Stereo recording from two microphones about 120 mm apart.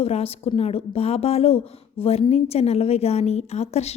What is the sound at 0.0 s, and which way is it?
A woman's voice, 55° left (ahead or behind).